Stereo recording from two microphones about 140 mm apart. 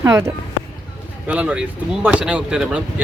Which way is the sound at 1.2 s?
10° right (ahead or behind).